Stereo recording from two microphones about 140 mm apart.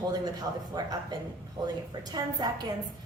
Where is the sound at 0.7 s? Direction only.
25° right (ahead or behind).